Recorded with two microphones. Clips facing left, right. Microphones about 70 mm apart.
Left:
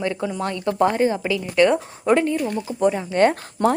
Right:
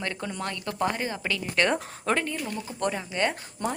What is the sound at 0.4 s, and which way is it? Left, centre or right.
Speech, left.